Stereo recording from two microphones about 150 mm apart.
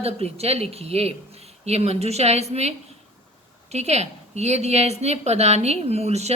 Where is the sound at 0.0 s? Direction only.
40° right (ahead or behind).